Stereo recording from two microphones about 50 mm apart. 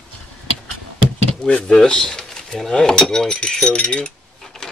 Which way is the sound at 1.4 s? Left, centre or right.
Left.